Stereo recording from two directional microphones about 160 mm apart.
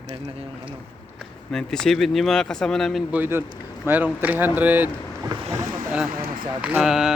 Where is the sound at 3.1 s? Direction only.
10° right (ahead or behind).